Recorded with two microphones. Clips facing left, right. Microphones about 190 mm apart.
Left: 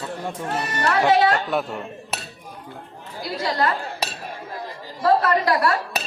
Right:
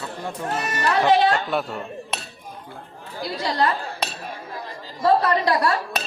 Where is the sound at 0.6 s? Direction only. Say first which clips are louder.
Even; 30° left (ahead or behind).